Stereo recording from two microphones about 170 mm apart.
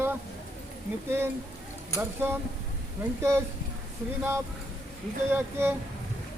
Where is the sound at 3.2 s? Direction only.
15° right (ahead or behind).